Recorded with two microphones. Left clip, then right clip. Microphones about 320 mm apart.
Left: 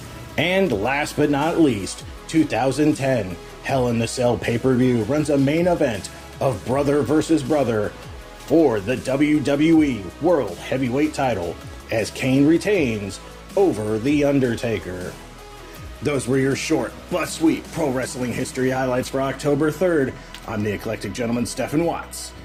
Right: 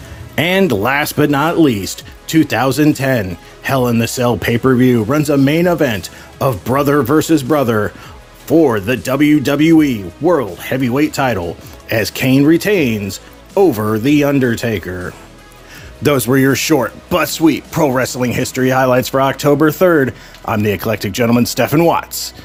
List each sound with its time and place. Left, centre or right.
0.3 s speech: right
16.0 s speech: right